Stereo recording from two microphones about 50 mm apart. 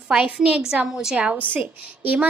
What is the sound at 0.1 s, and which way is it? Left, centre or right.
A woman's voice, right.